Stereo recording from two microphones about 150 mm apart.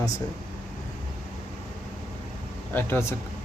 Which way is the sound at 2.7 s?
15° left (ahead or behind).